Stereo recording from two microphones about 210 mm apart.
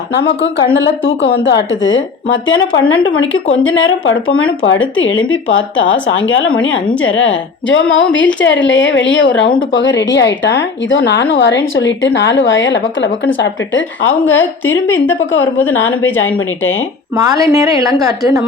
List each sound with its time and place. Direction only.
0.1 s speech: 55° left (ahead or behind)
17.2 s a woman's voice: 15° right (ahead or behind)